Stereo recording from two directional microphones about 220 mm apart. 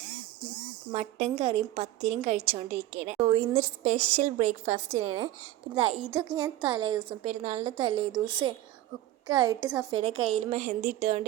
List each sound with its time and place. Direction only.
0.9 s a woman's voice: 25° right (ahead or behind)